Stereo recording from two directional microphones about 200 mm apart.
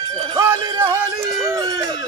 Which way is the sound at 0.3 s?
20° right (ahead or behind).